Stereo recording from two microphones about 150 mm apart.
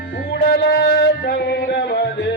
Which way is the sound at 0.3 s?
90° left.